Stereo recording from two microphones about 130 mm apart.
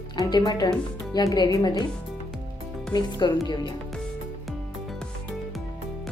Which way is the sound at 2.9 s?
30° left (ahead or behind).